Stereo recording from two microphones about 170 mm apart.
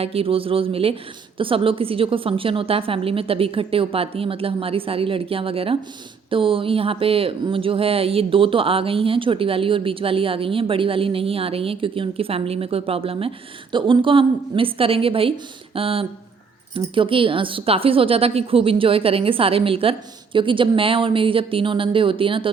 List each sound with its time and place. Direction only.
0.0 s speech: 35° right (ahead or behind)